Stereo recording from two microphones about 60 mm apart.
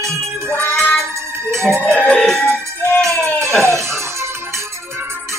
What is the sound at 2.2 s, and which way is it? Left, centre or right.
Music, centre.